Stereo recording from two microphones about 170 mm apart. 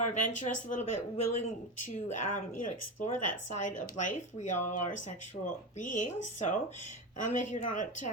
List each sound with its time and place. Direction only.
0.0 s speech: 45° left (ahead or behind)